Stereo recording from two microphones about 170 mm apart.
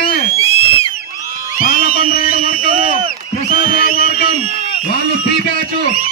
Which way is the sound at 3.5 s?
55° left (ahead or behind).